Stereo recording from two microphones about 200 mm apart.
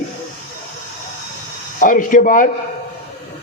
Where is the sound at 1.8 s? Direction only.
40° left (ahead or behind).